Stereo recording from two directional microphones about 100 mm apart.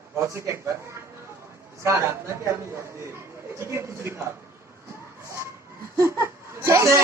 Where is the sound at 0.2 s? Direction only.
30° right (ahead or behind).